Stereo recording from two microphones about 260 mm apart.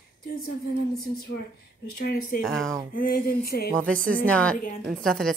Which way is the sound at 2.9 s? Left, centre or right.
Left.